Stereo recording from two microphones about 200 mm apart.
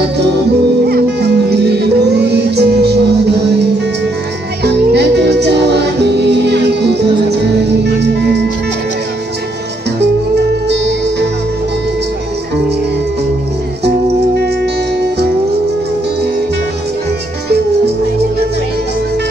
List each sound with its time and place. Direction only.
0.8 s music: 55° right (ahead or behind)
4.6 s music: 55° right (ahead or behind)
10.5 s music: 60° right (ahead or behind)
13.8 s music: 55° right (ahead or behind)